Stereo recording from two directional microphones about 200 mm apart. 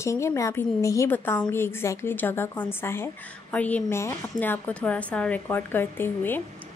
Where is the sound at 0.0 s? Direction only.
15° left (ahead or behind).